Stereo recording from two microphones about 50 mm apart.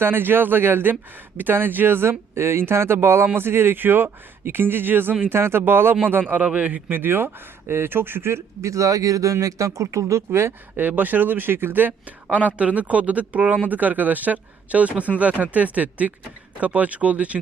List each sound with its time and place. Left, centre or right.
0.0 s speech: right
6.9 s speech: right
8.6 s speech: right
10.8 s speech: right